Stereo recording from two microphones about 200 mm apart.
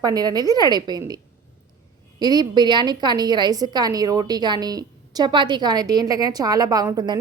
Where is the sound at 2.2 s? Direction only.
20° right (ahead or behind).